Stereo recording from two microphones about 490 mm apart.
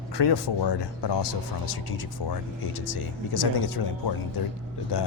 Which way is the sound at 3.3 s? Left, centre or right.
Left.